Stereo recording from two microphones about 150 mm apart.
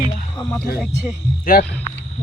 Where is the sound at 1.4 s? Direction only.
75° left (ahead or behind).